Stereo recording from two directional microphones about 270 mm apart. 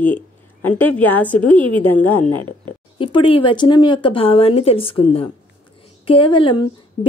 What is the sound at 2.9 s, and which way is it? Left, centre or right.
Speech, centre.